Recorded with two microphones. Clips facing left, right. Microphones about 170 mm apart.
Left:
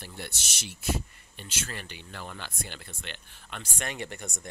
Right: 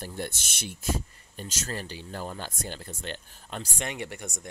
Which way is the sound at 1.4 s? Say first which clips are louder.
Right 4 dB; 40° right (ahead or behind).